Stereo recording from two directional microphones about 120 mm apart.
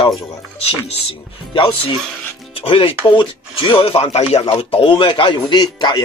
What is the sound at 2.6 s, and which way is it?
Speech, 50° left (ahead or behind).